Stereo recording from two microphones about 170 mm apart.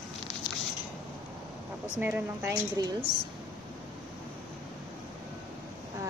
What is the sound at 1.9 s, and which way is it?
Speech, 10° right (ahead or behind).